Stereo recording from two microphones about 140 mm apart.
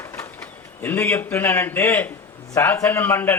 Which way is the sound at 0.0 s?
20° left (ahead or behind).